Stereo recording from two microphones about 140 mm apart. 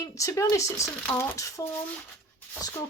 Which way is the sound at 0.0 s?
25° left (ahead or behind).